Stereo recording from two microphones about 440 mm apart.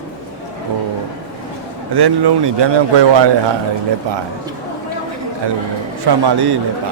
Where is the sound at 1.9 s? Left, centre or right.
Right.